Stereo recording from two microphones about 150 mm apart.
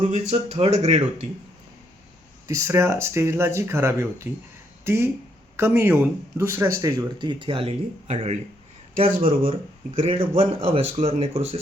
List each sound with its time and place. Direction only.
0.0 s speech: 45° right (ahead or behind)
2.5 s speech: 20° right (ahead or behind); by 8.4 s 50° right (ahead or behind)
10.0 s speech: 40° right (ahead or behind)